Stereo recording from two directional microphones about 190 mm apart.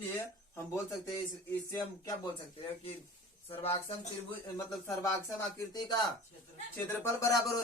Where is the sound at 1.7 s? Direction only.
20° left (ahead or behind).